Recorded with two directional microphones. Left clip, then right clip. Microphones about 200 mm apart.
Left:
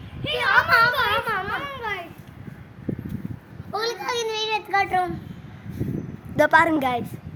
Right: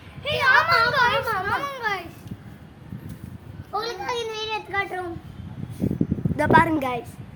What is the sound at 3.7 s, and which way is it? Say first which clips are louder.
A child's voice: left 1 dB; 55° left (ahead or behind).